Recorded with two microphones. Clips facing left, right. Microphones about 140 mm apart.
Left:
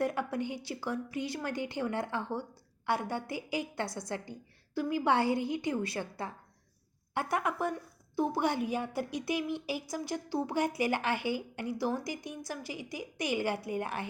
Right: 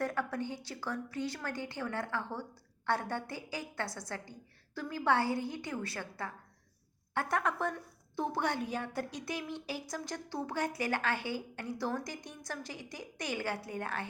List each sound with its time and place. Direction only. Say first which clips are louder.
0.0 s speech: left 3 dB; 15° left (ahead or behind)